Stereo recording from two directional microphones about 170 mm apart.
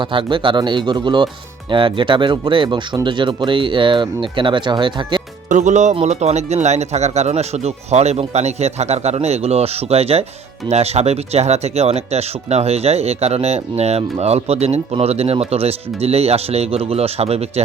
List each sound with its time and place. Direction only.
0.0 s speech: 30° right (ahead or behind)
5.5 s speech: 45° right (ahead or behind)